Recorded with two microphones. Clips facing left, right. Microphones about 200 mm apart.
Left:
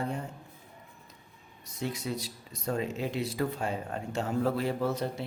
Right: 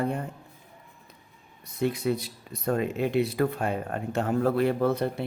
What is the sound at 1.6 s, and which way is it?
Speech, 60° right (ahead or behind).